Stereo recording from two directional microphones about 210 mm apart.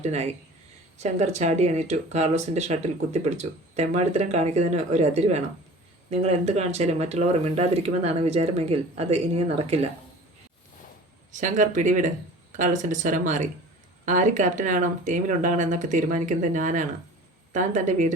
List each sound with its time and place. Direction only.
0.0 s speech: 30° right (ahead or behind)
11.3 s speech: 35° right (ahead or behind)